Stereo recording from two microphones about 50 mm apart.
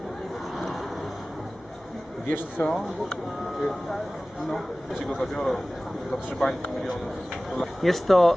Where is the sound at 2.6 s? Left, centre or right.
Left.